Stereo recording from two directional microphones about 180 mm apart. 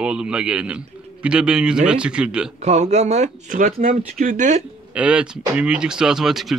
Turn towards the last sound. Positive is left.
turn(degrees=0)  # may be behind; listen again after turning